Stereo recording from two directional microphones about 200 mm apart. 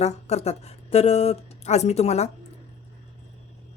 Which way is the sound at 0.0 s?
30° left (ahead or behind).